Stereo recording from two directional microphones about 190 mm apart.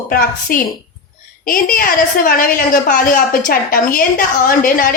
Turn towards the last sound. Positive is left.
turn(degrees=45)  # may be behind; listen again after turning